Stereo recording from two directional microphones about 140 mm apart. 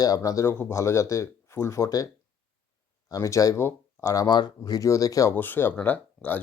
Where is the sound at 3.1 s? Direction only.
25° left (ahead or behind).